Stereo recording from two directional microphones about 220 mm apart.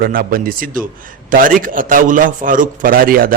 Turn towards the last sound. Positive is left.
turn(degrees=-40)  # may be behind; listen again after turning